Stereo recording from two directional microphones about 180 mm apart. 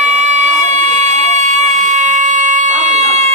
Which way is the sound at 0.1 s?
40° right (ahead or behind).